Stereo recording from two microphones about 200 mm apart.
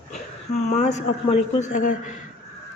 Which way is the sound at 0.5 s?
35° left (ahead or behind).